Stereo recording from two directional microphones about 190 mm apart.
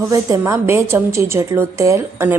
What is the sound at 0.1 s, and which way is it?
A woman's voice, 15° right (ahead or behind).